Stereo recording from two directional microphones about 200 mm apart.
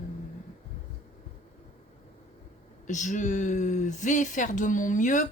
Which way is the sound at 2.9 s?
40° left (ahead or behind).